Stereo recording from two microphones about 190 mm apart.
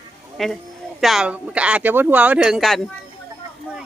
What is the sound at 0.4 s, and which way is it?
Speech, centre (ahead or behind).